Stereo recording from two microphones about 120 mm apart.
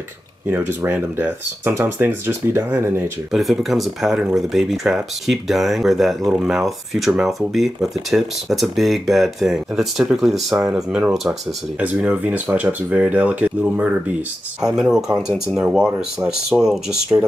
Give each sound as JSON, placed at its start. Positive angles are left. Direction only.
{"t": 0.5, "sound": "speech", "side_deg": -20}
{"t": 3.3, "sound": "speech", "side_deg": 0}